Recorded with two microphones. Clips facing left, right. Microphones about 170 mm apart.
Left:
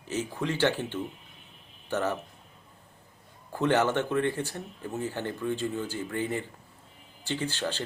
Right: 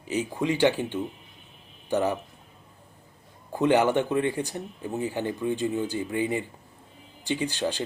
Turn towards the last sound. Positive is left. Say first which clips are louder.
# right 4 dB
turn(degrees=-15)  # may be behind; listen again after turning